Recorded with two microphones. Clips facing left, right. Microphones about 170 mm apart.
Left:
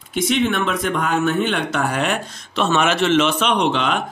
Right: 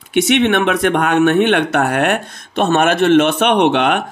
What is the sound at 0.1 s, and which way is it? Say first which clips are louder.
Speech: right 6 dB; 75° right (ahead or behind).